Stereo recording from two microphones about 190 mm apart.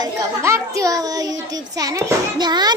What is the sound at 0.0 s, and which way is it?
A child's voice, 15° right (ahead or behind).